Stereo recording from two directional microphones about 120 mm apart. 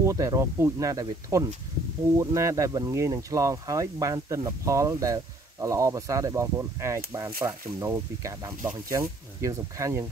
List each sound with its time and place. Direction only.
0.0 s speech: 25° right (ahead or behind)